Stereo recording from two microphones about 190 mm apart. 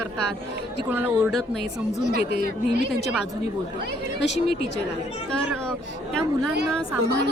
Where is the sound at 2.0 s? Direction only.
60° right (ahead or behind).